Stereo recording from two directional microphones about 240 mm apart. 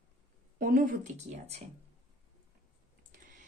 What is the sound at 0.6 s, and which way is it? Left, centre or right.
Speech, right.